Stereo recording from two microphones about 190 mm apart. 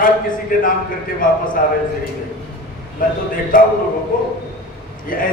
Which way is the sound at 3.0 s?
45° left (ahead or behind).